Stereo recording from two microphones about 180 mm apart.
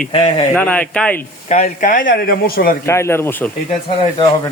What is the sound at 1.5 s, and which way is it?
Speech, 40° left (ahead or behind).